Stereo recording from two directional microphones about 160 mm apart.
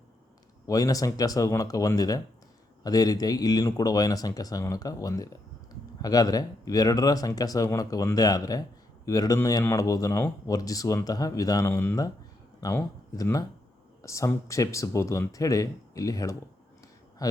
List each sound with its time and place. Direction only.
0.7 s speech: 20° left (ahead or behind)